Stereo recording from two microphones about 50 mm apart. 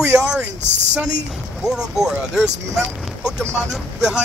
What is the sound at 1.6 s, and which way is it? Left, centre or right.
Speech, centre.